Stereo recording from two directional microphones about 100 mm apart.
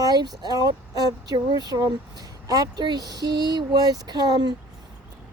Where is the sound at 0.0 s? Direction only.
40° right (ahead or behind).